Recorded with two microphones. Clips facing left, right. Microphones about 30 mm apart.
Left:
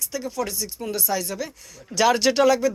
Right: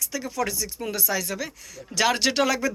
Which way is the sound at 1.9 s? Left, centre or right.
Right.